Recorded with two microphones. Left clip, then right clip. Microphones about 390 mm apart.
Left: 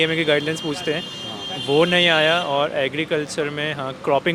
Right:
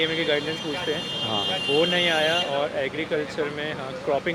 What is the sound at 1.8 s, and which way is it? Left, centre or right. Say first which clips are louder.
Speech: left 7 dB; left.